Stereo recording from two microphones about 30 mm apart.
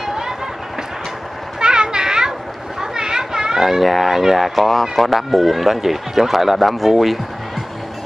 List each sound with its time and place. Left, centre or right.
0.0 s run: centre
1.6 s children playing: right
3.6 s speech: centre